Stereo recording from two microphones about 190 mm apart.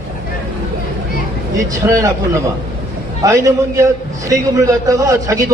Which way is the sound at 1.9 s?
15° right (ahead or behind).